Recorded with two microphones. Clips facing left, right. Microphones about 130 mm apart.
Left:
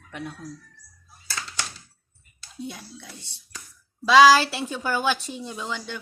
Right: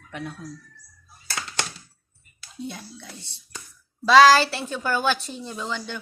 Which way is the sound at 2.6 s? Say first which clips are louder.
Right 2 dB; 5° left (ahead or behind).